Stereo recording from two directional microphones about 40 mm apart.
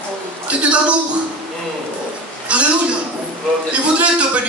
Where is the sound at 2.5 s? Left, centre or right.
Right.